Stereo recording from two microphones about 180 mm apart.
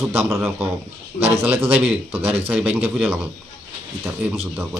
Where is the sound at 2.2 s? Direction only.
35° right (ahead or behind).